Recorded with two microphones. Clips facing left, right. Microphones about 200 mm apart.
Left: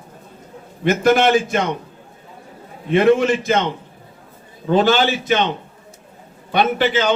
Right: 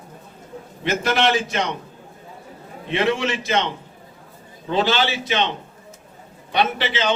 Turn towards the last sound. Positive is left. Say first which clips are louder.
# left 5 dB
turn(degrees=50)  # may be behind; listen again after turning